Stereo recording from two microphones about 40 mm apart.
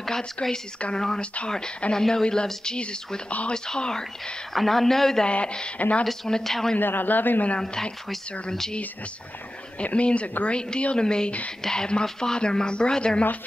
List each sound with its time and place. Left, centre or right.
0.2 s a man's voice: centre
3.3 s speech: left
3.5 s speech: centre
4.6 s a man's voice: centre
5.2 s speech: left
6.2 s a man's voice: centre
6.8 s a man's voice: left
7.5 s a man's voice: centre
9.9 s speech: left